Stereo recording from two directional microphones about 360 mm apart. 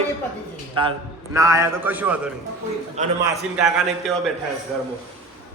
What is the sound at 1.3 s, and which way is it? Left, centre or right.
Speech, centre.